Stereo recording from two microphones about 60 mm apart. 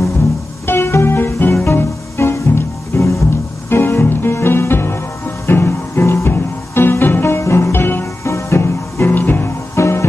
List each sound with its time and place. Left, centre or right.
0.7 s music: left
3.0 s music: left
3.7 s music: left
7.3 s music: left
8.2 s music: left
9.8 s music: left